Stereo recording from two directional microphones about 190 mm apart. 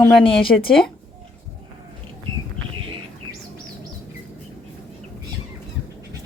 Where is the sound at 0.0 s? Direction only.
30° left (ahead or behind).